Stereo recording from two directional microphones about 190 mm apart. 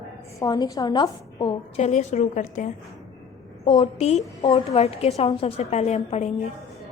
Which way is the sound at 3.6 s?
30° left (ahead or behind).